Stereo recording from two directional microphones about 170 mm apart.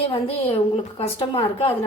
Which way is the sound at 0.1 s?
35° left (ahead or behind).